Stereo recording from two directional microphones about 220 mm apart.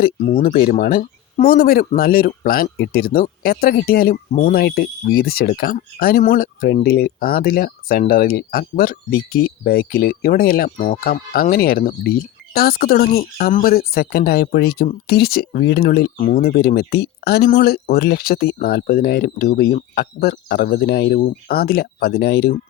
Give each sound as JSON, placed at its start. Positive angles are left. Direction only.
{"t": 0.0, "sound": "speech", "side_deg": 35}